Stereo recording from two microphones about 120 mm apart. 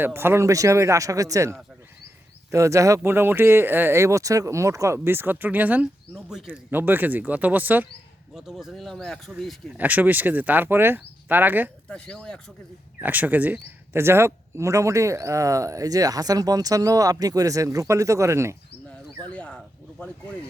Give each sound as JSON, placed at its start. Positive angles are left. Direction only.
{"t": 0.0, "sound": "speech", "side_deg": -20}
{"t": 6.7, "sound": "speech", "side_deg": -15}
{"t": 8.3, "sound": "speech", "side_deg": -5}
{"t": 9.7, "sound": "speech", "side_deg": -15}
{"t": 11.9, "sound": "speech", "side_deg": 5}
{"t": 13.0, "sound": "speech", "side_deg": -15}
{"t": 19.3, "sound": "a sound", "side_deg": 10}